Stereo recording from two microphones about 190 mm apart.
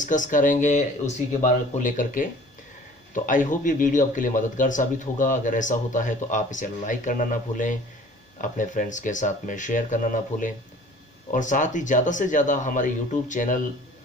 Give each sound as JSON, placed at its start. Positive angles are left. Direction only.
{"t": 0.0, "sound": "speech", "side_deg": 40}
{"t": 3.3, "sound": "a man's voice", "side_deg": 45}